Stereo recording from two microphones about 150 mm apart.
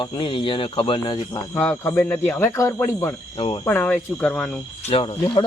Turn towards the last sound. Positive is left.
turn(degrees=35)  # may be behind; listen again after turning